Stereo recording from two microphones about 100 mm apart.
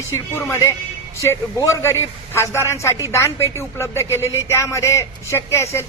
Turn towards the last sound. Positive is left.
turn(degrees=25)  # may be behind; listen again after turning